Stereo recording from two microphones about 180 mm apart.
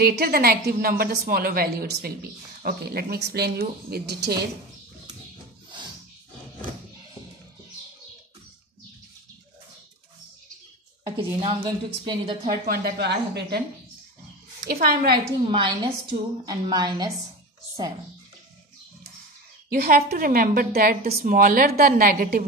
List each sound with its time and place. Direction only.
0.0 s a woman's voice: 60° right (ahead or behind)
11.1 s a woman's voice: 30° right (ahead or behind)
12.4 s a woman's voice: 60° right (ahead or behind)
14.6 s a woman's voice: 55° right (ahead or behind)
15.5 s a woman's voice: 25° right (ahead or behind)
19.7 s a woman's voice: 55° right (ahead or behind)